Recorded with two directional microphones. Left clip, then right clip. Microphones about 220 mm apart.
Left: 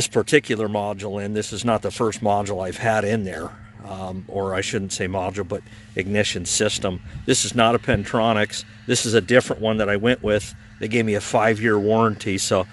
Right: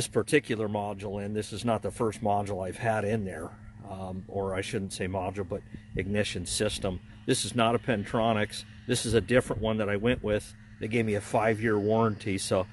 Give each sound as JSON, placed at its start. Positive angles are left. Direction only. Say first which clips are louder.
{"t": 0.0, "sound": "speech", "louder": "left 8 dB", "side_deg": 15}